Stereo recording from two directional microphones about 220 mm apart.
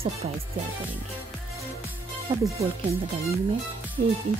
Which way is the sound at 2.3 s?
15° right (ahead or behind).